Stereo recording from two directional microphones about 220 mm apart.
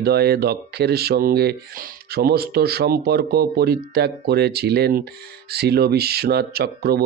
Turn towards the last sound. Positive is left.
turn(degrees=-45)  # may be behind; listen again after turning